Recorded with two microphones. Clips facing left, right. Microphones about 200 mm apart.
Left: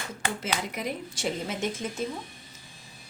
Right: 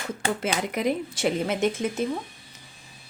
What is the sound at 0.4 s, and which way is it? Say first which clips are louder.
Speech: right 8 dB; 60° right (ahead or behind).